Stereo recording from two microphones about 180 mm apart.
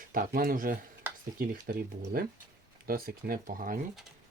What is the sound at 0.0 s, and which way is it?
Speech, 50° right (ahead or behind).